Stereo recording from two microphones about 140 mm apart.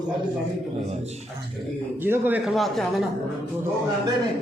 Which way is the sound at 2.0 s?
15° right (ahead or behind).